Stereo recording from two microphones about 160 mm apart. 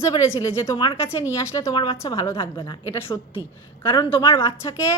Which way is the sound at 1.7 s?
30° left (ahead or behind).